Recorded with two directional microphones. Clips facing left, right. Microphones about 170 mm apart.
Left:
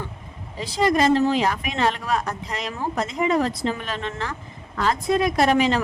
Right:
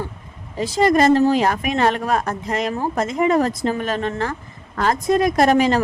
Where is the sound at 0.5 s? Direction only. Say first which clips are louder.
Right 4 dB; 45° right (ahead or behind).